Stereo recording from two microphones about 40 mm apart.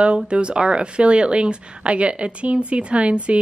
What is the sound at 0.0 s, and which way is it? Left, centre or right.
Speech, right.